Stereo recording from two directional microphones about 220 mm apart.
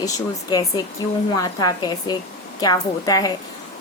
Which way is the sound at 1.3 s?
20° left (ahead or behind).